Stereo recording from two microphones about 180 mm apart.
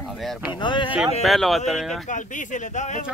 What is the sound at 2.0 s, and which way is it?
Speech, 45° left (ahead or behind).